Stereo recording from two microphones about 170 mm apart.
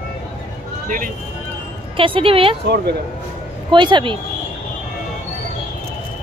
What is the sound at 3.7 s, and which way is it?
Speech, 30° right (ahead or behind).